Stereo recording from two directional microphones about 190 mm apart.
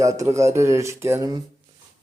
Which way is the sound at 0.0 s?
15° right (ahead or behind).